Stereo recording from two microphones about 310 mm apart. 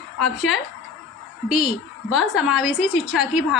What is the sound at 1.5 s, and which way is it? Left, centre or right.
Speech, centre.